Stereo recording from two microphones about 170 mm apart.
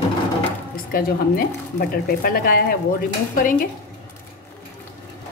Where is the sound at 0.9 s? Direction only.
60° left (ahead or behind).